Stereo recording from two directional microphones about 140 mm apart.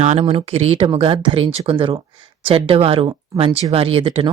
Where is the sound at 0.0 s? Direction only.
50° right (ahead or behind).